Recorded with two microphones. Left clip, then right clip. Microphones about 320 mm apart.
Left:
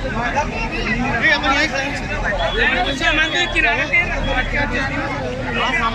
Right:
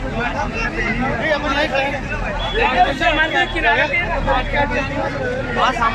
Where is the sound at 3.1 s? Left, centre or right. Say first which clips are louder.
Even; right.